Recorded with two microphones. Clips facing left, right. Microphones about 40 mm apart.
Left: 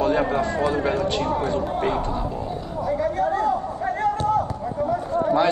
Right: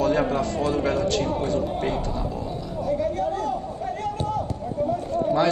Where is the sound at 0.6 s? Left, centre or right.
Left.